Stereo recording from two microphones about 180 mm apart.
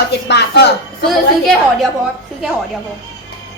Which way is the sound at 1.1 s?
Centre (ahead or behind).